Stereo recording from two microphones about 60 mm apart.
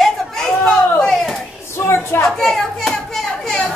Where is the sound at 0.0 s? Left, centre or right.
Centre.